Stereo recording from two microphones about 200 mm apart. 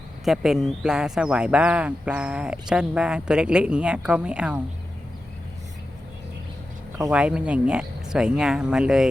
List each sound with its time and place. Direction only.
0.3 s speech: centre (ahead or behind)
7.1 s speech: 5° right (ahead or behind)